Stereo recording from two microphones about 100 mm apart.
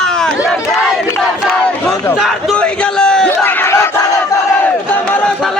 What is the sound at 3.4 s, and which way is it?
Battle cry, 25° left (ahead or behind).